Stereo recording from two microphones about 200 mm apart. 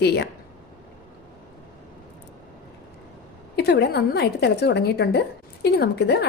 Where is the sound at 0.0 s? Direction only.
55° left (ahead or behind).